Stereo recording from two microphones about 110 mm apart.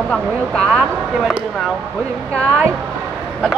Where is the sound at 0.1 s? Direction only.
5° left (ahead or behind).